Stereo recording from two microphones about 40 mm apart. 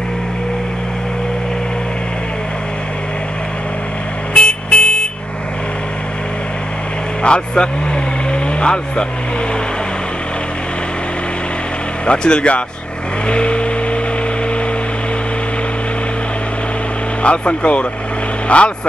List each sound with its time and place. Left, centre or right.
4.3 s vehicle: left
7.2 s speech: left
8.3 s vehicle: left
12.1 s speech: left
13.3 s vehicle: left
17.2 s speech: left